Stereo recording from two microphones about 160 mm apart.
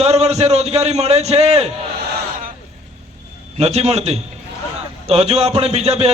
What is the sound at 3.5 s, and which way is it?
A man's voice, 40° right (ahead or behind).